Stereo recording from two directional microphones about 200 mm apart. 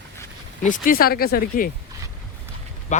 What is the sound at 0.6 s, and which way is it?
Speech, 40° left (ahead or behind).